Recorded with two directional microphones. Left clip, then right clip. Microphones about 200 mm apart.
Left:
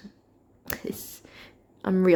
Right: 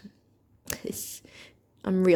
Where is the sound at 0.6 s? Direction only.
15° right (ahead or behind).